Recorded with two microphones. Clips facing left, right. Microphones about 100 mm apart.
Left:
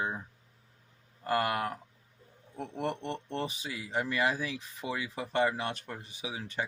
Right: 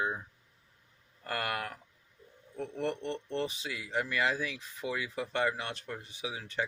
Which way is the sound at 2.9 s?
15° left (ahead or behind).